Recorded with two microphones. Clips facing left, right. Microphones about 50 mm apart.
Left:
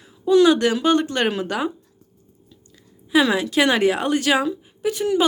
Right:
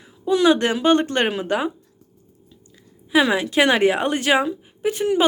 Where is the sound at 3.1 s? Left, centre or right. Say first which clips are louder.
Even; right.